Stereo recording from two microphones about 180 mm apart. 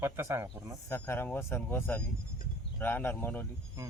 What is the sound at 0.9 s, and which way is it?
Speech, 10° left (ahead or behind).